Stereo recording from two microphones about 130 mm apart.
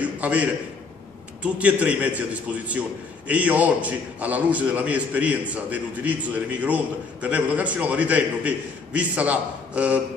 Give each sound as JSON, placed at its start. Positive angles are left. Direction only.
{"t": 0.0, "sound": "a man's voice", "side_deg": -10}